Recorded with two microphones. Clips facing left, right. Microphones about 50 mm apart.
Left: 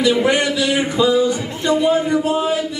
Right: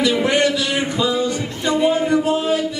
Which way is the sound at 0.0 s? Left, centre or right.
Centre.